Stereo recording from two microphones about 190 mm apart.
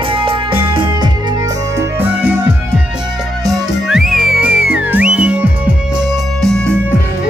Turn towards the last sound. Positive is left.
turn(degrees=5)  # may be behind; listen again after turning